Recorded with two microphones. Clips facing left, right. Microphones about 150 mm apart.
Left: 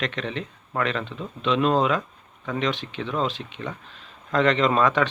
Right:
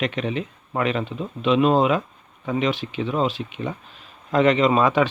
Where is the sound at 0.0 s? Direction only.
10° right (ahead or behind).